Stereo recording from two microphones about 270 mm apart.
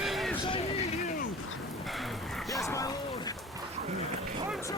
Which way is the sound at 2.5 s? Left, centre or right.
Centre.